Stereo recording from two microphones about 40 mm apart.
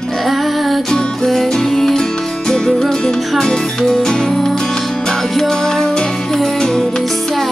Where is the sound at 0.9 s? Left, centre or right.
Centre.